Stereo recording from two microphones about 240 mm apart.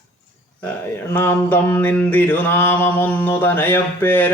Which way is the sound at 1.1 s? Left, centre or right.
Centre.